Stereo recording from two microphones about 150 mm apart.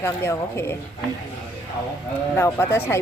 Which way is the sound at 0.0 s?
15° left (ahead or behind).